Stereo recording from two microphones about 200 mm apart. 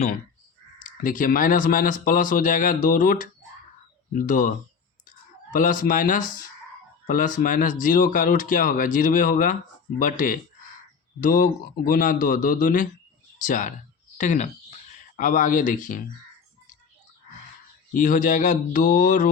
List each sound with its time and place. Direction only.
0.9 s speech: 40° left (ahead or behind)
5.0 s clicking: 40° left (ahead or behind)
7.1 s speech: 40° left (ahead or behind)
17.9 s speech: 40° left (ahead or behind)